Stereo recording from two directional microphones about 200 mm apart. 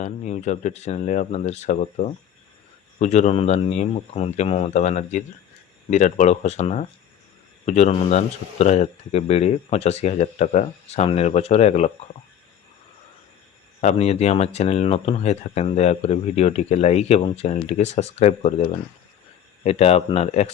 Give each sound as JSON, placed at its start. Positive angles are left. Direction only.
{"t": 0.0, "sound": "speech", "side_deg": 35}
{"t": 13.8, "sound": "speech", "side_deg": 30}